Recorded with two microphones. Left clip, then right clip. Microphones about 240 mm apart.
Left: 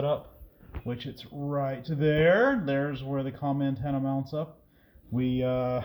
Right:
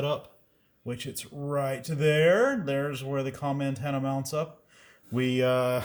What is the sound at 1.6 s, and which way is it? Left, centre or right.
Speech, centre.